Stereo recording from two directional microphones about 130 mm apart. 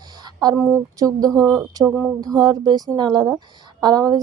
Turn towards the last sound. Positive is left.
turn(degrees=-30)  # may be behind; listen again after turning